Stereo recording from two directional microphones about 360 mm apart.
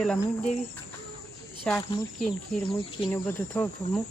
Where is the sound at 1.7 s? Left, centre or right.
Centre.